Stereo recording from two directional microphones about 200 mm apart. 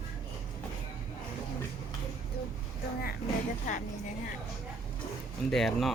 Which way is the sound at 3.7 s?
40° left (ahead or behind).